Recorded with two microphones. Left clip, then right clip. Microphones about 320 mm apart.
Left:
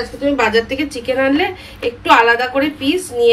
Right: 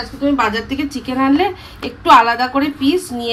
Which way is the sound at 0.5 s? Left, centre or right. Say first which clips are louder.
Left 4 dB; right.